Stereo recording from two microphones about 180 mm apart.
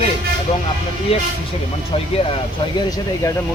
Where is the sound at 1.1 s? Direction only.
35° left (ahead or behind).